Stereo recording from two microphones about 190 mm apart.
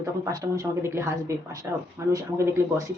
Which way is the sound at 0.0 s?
20° right (ahead or behind).